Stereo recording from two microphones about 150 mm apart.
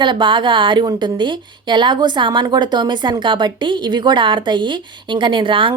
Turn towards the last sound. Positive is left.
turn(degrees=-35)  # may be behind; listen again after turning